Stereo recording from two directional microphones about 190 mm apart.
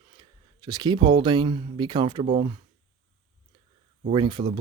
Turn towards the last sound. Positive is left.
turn(degrees=-25)  # may be behind; listen again after turning